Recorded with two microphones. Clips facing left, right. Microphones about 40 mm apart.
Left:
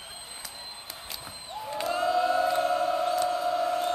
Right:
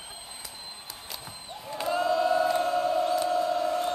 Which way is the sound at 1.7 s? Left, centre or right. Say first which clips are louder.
Right 1 dB; centre.